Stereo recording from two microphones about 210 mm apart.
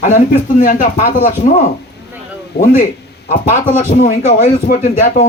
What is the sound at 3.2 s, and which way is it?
A man's voice, 30° left (ahead or behind).